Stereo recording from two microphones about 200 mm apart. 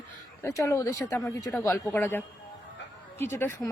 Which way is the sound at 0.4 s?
15° left (ahead or behind).